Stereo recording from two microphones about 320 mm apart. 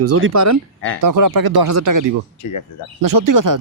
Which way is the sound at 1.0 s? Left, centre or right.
Right.